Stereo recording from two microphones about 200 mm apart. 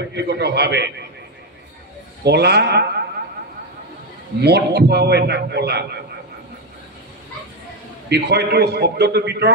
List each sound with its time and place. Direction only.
0.1 s a man's voice: 55° right (ahead or behind)
2.2 s a man's voice: 55° right (ahead or behind)
4.4 s a man's voice: 55° right (ahead or behind)
8.1 s a man's voice: 55° right (ahead or behind)